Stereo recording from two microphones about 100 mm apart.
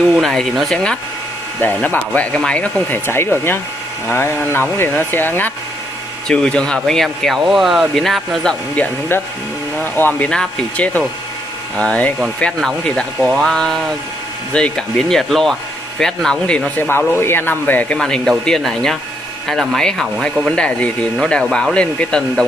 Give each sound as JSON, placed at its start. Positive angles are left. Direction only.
{"t": 0.2, "sound": "speech", "side_deg": 5}
{"t": 1.6, "sound": "speech", "side_deg": 15}
{"t": 3.1, "sound": "speech", "side_deg": 25}
{"t": 6.2, "sound": "speech", "side_deg": 10}
{"t": 8.7, "sound": "speech", "side_deg": 15}
{"t": 17.9, "sound": "speech", "side_deg": 5}